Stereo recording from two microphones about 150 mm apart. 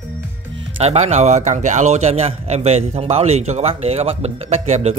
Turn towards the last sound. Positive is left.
turn(degrees=-45)  # may be behind; listen again after turning